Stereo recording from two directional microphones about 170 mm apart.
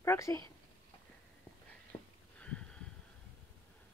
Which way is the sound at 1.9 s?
30° left (ahead or behind).